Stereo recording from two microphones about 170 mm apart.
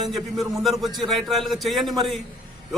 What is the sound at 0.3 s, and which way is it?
A man's voice, centre (ahead or behind).